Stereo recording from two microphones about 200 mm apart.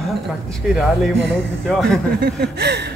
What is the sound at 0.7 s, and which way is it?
Speech, centre (ahead or behind).